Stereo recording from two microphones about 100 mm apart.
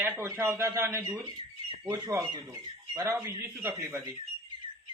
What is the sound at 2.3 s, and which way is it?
Speech, 50° right (ahead or behind).